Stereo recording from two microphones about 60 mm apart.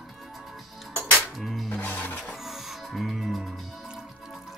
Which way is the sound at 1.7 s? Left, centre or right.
Left.